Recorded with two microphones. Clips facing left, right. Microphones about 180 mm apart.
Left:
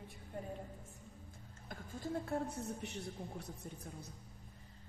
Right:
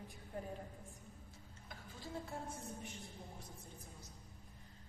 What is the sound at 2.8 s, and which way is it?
A man's voice, 75° left (ahead or behind).